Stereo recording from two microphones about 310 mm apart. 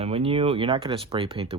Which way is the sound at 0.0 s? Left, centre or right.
Centre.